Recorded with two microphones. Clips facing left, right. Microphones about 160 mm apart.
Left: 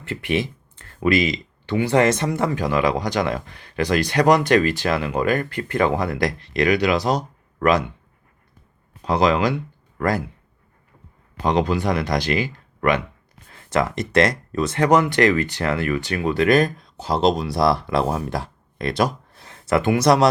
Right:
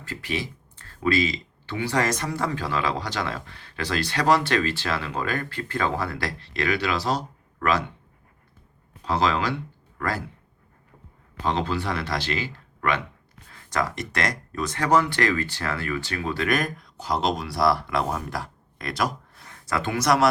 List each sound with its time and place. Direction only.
0.2 s speech: 20° left (ahead or behind)
9.0 s speech: 15° left (ahead or behind)
11.4 s speech: 15° left (ahead or behind)